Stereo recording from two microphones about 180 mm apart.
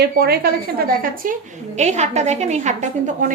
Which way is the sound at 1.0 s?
50° right (ahead or behind).